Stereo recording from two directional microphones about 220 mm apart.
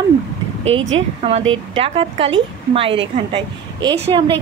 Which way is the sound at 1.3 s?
25° right (ahead or behind).